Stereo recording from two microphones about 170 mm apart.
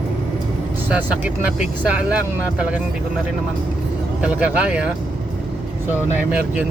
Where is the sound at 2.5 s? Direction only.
5° right (ahead or behind).